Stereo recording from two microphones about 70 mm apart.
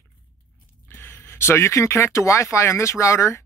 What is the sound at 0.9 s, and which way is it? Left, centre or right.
Speech, left.